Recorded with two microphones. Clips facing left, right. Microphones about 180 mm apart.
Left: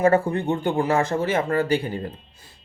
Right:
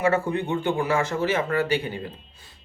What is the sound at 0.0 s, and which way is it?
Speech, 50° left (ahead or behind).